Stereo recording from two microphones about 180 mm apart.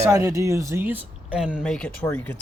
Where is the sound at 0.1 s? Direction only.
15° right (ahead or behind).